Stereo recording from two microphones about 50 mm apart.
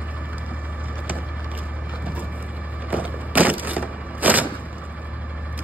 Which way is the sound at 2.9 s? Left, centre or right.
Right.